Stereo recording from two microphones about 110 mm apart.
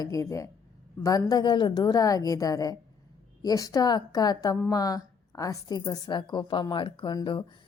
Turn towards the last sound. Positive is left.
turn(degrees=45)  # may be behind; listen again after turning